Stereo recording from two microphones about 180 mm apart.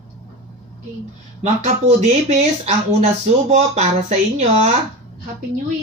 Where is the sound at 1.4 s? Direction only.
40° right (ahead or behind).